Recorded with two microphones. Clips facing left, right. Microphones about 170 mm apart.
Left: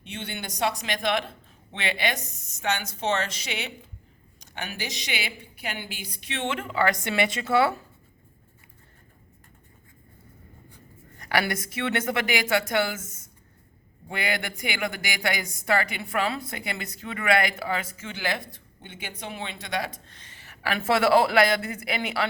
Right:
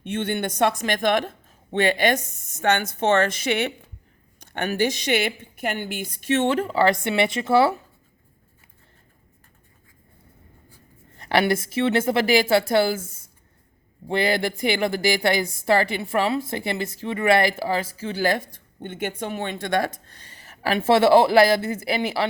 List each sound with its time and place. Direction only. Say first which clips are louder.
0.0 s speech: right 11 dB; 50° right (ahead or behind); by 7.8 s 25° right (ahead or behind)
11.2 s speech: right 6 dB; 30° right (ahead or behind)
20.7 s speech: right 5 dB; 25° right (ahead or behind)